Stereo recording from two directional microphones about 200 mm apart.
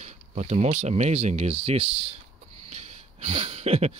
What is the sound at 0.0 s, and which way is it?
Speech, 35° right (ahead or behind).